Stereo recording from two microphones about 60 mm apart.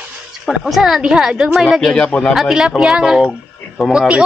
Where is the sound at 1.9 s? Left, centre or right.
Centre.